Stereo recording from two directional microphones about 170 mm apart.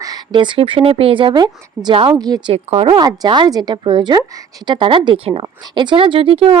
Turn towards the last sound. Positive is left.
turn(degrees=-35)  # may be behind; listen again after turning